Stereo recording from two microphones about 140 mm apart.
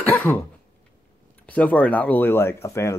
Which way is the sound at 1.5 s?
10° left (ahead or behind).